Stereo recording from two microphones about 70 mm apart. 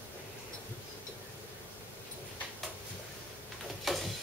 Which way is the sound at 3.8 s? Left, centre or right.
Centre.